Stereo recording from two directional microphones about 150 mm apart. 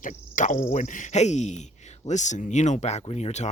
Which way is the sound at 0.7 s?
55° left (ahead or behind).